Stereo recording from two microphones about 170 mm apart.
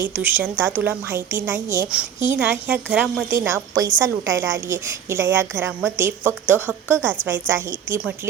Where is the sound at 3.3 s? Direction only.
15° right (ahead or behind).